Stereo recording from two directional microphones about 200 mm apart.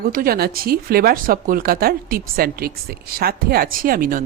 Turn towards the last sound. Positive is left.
turn(degrees=-45)  # may be behind; listen again after turning